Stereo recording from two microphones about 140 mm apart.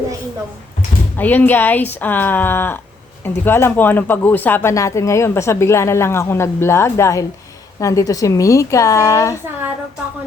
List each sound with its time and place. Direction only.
1.1 s speech: 15° left (ahead or behind)